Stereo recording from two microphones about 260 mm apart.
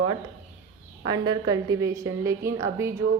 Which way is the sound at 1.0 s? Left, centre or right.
Centre.